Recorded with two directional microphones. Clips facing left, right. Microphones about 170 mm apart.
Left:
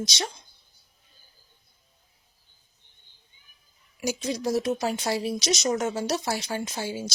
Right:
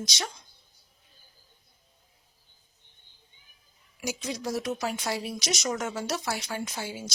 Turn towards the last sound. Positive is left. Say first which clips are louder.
# left 4 dB
turn(degrees=30)  # may be behind; listen again after turning